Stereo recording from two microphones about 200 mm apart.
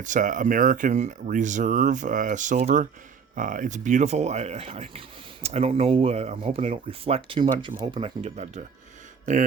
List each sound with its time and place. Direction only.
0.0 s speech: 40° right (ahead or behind)